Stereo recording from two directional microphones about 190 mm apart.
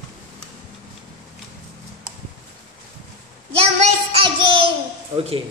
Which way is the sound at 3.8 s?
30° right (ahead or behind).